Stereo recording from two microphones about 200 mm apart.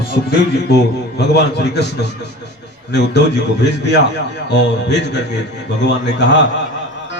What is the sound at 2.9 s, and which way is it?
A man's voice, 60° left (ahead or behind).